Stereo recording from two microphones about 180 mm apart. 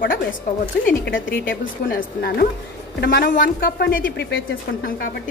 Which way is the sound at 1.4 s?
60° left (ahead or behind).